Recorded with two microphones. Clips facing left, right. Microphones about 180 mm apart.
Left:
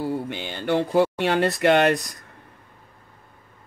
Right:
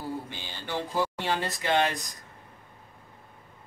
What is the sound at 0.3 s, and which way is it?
Speech, 65° left (ahead or behind).